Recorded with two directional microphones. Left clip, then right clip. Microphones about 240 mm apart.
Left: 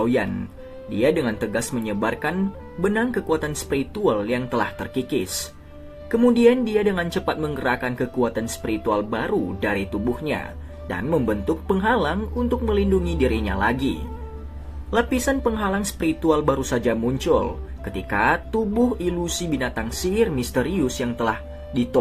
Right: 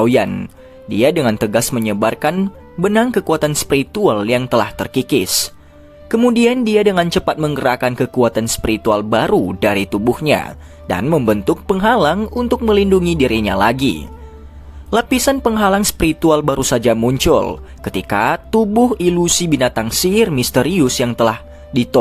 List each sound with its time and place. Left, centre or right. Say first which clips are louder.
0.0 s speech: right 8 dB; right
14.8 s speech: right 7 dB; right